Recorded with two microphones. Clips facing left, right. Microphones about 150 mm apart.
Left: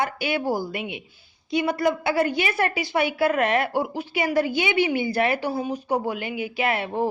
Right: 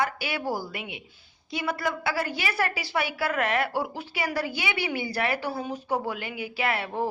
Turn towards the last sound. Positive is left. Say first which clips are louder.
# left 4 dB
turn(degrees=20)  # may be behind; listen again after turning